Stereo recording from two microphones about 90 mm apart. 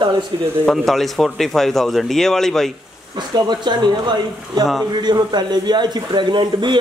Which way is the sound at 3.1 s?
55° right (ahead or behind).